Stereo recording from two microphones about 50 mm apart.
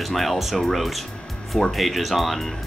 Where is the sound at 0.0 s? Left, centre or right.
Centre.